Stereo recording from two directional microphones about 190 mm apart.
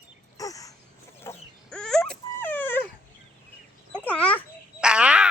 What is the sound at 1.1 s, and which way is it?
Dog, 10° left (ahead or behind).